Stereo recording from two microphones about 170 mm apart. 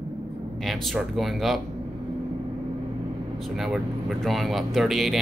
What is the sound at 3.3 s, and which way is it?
Speech, centre (ahead or behind).